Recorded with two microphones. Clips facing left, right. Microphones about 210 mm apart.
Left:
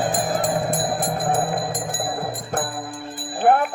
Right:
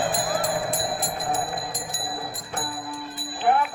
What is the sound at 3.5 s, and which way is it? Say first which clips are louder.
Jingle bell: left 5 dB; 50° left (ahead or behind).